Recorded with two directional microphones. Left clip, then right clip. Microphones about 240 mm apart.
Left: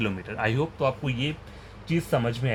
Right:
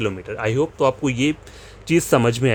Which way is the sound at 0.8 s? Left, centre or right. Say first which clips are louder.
Right 9 dB; right.